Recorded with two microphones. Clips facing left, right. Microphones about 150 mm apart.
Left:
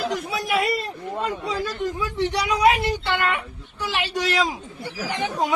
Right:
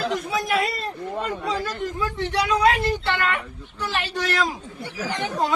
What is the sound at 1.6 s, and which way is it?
Speech, 15° left (ahead or behind).